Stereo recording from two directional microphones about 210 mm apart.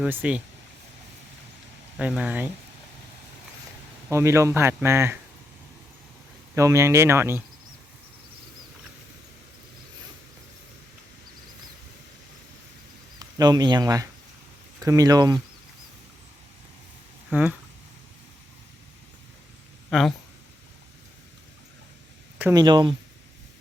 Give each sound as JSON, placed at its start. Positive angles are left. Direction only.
{"t": 0.0, "sound": "speech", "side_deg": -5}
{"t": 2.0, "sound": "speech", "side_deg": -5}
{"t": 4.1, "sound": "speech", "side_deg": -15}
{"t": 6.5, "sound": "speech", "side_deg": -15}
{"t": 13.1, "sound": "speech", "side_deg": -20}
{"t": 17.3, "sound": "speech", "side_deg": -5}
{"t": 19.9, "sound": "speech", "side_deg": 0}
{"t": 22.5, "sound": "speech", "side_deg": -20}